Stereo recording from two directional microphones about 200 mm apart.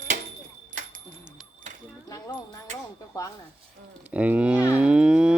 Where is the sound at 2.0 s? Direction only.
15° left (ahead or behind).